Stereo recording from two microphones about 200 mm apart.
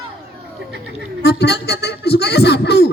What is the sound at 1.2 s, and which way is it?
Music, 55° left (ahead or behind).